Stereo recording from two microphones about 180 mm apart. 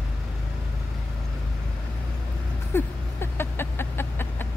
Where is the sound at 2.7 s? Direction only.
15° left (ahead or behind).